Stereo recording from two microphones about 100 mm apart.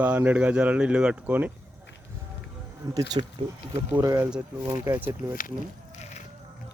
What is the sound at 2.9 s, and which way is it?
Speech, 40° right (ahead or behind).